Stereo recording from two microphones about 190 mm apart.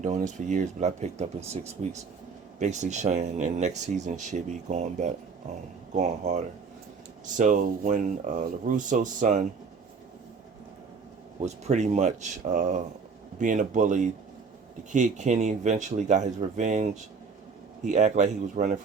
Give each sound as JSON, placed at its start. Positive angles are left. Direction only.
{"t": 0.0, "sound": "speech", "side_deg": -40}
{"t": 11.4, "sound": "speech", "side_deg": -35}